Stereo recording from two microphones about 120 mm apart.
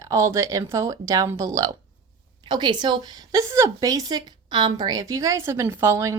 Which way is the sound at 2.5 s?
40° right (ahead or behind).